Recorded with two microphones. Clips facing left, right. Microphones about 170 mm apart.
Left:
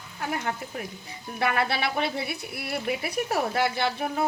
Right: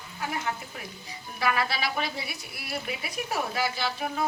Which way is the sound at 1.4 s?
60° left (ahead or behind).